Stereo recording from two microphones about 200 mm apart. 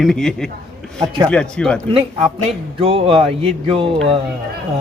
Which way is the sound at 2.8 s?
30° right (ahead or behind).